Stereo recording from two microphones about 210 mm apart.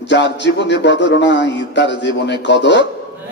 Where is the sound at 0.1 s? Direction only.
55° left (ahead or behind).